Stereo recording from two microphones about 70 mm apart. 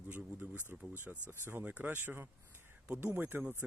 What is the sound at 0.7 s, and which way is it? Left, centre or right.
Speech, right.